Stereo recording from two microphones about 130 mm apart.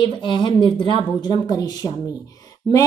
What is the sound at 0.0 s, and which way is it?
A woman's voice, 35° left (ahead or behind).